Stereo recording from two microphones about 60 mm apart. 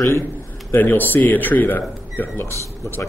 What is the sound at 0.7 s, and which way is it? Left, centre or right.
Speech, left.